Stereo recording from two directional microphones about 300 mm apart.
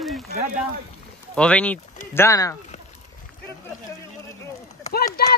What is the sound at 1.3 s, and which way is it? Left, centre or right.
Speech, centre.